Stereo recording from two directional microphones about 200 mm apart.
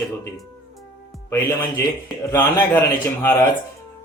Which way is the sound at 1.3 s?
15° left (ahead or behind).